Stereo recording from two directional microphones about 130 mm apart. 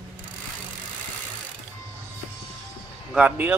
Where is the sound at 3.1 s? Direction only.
10° right (ahead or behind).